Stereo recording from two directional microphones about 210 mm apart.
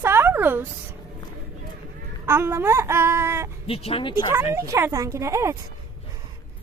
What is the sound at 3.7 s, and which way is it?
Speech, 25° left (ahead or behind).